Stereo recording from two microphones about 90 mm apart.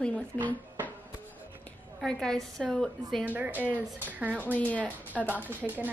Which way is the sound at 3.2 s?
20° right (ahead or behind).